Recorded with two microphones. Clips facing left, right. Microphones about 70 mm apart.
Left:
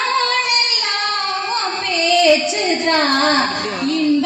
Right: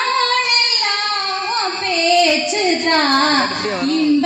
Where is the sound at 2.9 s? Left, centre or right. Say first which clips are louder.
Left 1 dB; right.